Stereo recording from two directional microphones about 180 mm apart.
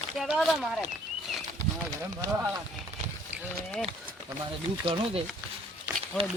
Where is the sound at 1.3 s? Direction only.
Centre (ahead or behind).